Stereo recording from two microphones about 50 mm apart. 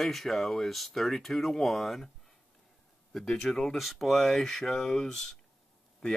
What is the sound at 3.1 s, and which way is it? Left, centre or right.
Speech, centre.